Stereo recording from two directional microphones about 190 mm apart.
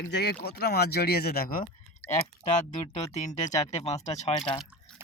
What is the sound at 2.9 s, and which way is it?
Speech, 35° left (ahead or behind).